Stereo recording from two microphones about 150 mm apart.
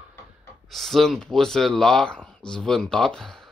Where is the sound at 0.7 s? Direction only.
Centre (ahead or behind).